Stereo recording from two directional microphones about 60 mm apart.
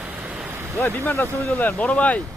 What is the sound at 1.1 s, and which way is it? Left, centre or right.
Speech, left.